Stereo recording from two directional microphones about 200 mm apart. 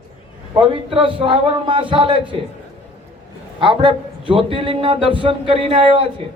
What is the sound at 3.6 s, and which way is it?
A man's voice, 25° right (ahead or behind).